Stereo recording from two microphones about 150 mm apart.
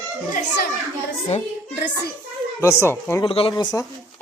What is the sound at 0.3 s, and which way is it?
Speech, 90° left.